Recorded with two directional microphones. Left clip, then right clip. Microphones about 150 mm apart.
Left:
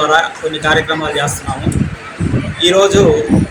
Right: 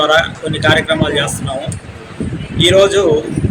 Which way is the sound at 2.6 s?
35° right (ahead or behind).